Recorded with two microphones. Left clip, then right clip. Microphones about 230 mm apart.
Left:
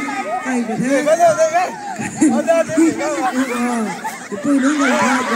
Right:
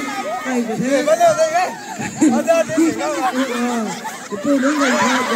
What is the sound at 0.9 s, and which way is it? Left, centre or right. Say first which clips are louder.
Speech: left 1 dB; left.